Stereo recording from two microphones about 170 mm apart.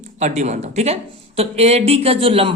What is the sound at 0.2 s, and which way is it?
Speech, 45° right (ahead or behind).